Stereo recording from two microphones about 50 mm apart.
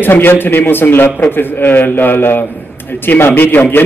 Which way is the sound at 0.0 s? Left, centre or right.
Left.